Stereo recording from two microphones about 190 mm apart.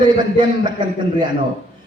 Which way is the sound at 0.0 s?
25° right (ahead or behind).